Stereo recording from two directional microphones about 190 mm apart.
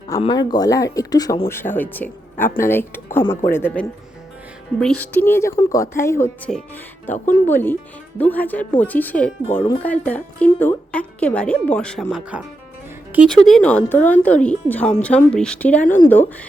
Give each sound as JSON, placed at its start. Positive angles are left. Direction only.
{"t": 0.2, "sound": "speech", "side_deg": 25}